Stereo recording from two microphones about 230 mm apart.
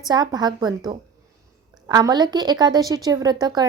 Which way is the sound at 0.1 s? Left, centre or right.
Centre.